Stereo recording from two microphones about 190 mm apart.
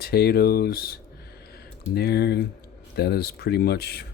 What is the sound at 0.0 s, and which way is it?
Speech, 55° left (ahead or behind).